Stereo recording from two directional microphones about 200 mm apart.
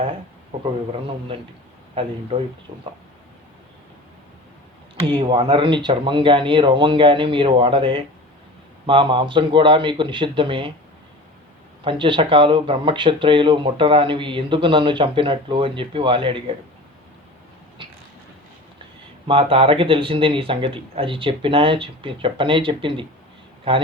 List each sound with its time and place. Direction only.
2.0 s speech: 25° right (ahead or behind)
5.0 s speech: 25° right (ahead or behind)
11.9 s speech: 25° right (ahead or behind)
19.3 s speech: 25° right (ahead or behind)